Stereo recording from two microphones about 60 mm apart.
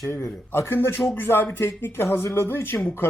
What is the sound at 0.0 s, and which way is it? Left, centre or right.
Speech, left.